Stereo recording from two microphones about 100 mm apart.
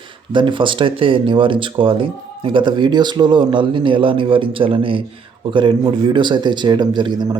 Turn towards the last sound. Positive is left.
turn(degrees=-45)  # may be behind; listen again after turning